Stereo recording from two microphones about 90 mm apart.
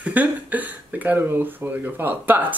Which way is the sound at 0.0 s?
20° right (ahead or behind).